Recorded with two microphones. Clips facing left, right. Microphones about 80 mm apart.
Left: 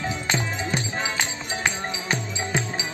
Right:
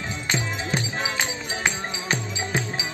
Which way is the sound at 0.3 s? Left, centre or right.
Centre.